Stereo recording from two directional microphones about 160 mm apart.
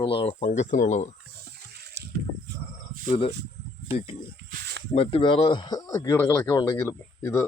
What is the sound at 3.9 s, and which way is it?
Speech, 35° left (ahead or behind).